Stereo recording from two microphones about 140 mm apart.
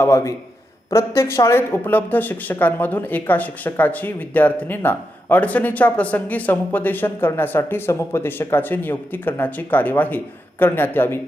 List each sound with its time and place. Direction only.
0.0 s a man's voice: 20° left (ahead or behind)